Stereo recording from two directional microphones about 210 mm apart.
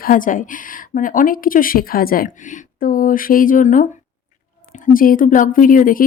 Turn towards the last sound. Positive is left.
turn(degrees=40)  # may be behind; listen again after turning